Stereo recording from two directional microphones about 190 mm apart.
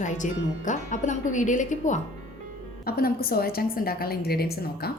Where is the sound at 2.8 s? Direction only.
55° left (ahead or behind).